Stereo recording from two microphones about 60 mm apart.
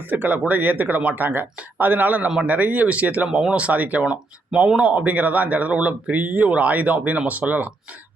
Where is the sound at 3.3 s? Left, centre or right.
Centre.